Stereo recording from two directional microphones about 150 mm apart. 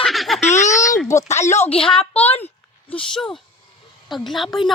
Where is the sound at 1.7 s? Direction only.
40° left (ahead or behind).